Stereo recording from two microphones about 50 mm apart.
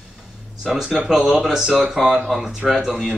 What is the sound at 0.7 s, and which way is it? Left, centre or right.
Speech, centre.